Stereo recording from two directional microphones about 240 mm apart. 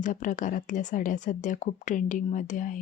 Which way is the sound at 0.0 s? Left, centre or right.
Left.